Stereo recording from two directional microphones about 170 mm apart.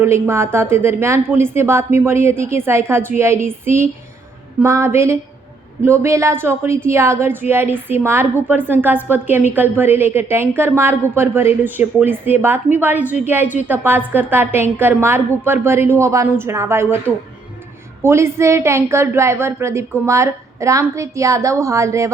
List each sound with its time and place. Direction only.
0.0 s a woman's voice: 15° right (ahead or behind)
18.0 s a woman's voice: 15° right (ahead or behind)